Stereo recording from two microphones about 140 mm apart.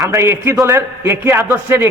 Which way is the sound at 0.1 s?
20° right (ahead or behind).